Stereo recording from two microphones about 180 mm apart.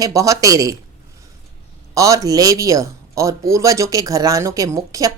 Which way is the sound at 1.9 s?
20° right (ahead or behind).